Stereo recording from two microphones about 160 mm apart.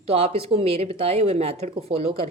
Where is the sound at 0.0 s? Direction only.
40° right (ahead or behind).